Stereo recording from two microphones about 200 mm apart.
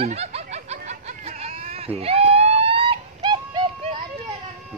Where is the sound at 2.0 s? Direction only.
30° right (ahead or behind).